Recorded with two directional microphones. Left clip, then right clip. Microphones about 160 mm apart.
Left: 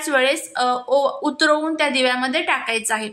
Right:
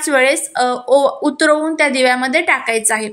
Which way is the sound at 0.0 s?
25° right (ahead or behind).